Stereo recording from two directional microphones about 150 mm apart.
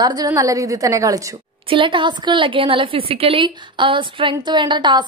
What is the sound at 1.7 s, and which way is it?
A woman's voice, 35° right (ahead or behind).